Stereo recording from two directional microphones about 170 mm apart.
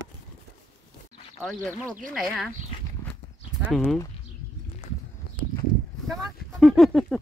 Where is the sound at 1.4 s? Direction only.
5° left (ahead or behind).